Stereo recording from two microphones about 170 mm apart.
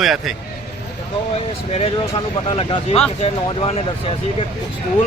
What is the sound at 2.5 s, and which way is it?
Speech, 30° left (ahead or behind).